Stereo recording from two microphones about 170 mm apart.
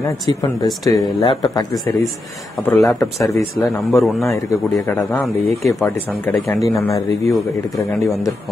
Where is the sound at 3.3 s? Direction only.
20° left (ahead or behind).